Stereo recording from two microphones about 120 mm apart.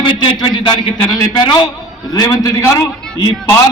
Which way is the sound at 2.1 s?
30° left (ahead or behind).